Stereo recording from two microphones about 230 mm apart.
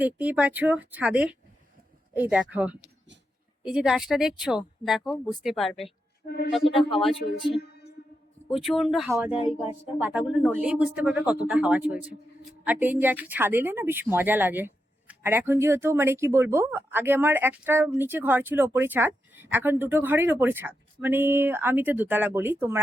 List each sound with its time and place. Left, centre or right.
0.0 s a woman's voice: centre
6.2 s speech: left
6.7 s speech: left
8.5 s a man's voice: centre
9.4 s speech: left
10.0 s a man's voice: centre